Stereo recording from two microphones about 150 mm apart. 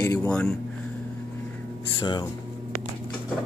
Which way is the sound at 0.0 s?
20° left (ahead or behind).